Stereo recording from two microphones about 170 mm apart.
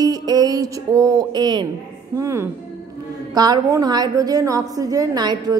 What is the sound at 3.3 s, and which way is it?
Music, 25° right (ahead or behind).